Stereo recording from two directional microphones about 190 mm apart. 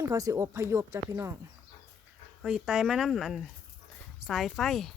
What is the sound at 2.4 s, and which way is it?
Speech, 5° right (ahead or behind).